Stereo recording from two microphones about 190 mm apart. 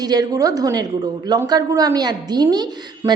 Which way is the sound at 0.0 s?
20° right (ahead or behind).